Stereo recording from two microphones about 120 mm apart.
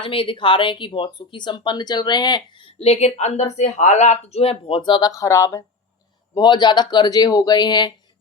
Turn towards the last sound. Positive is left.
turn(degrees=35)  # may be behind; listen again after turning